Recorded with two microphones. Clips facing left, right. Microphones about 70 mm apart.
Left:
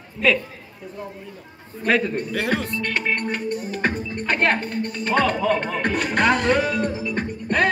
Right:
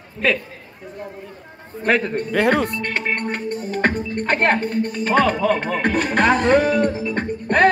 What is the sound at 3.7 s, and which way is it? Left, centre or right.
Music, right.